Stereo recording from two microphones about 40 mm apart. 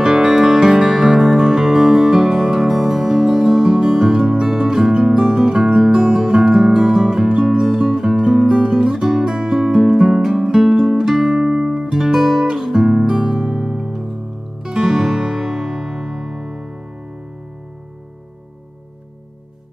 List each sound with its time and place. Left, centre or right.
0.0 s music: centre
11.2 s guitar: centre
13.1 s music: centre
14.9 s music: centre